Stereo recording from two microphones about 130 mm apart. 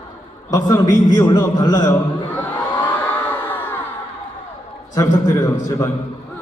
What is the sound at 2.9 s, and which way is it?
Crowd, 15° left (ahead or behind).